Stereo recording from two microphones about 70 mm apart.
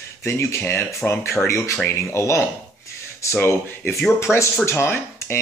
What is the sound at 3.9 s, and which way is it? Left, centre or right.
Speech, centre.